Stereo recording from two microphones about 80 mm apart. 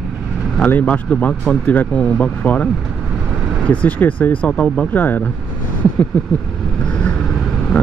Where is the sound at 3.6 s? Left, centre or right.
Centre.